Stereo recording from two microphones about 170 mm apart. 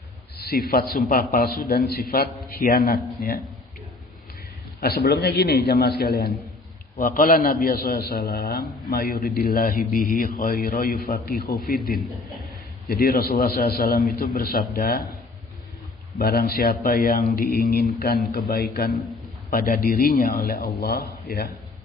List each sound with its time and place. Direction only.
0.3 s a man's voice: 65° left (ahead or behind)
4.8 s a man's voice: 65° left (ahead or behind)
7.0 s a man's voice: 55° left (ahead or behind)
16.1 s a man's voice: 60° left (ahead or behind)